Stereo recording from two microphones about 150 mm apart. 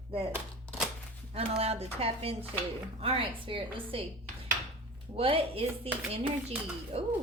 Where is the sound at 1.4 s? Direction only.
40° right (ahead or behind).